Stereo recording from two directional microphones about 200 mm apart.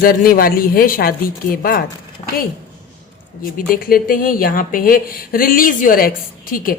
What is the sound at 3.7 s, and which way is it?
A woman's voice, 45° left (ahead or behind).